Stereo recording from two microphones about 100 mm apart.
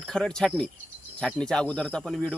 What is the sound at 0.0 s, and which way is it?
Speech, 5° left (ahead or behind).